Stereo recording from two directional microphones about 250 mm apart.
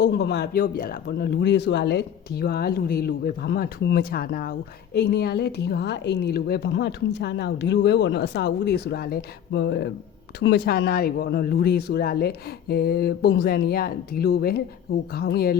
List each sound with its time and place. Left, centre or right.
0.0 s a woman's voice: left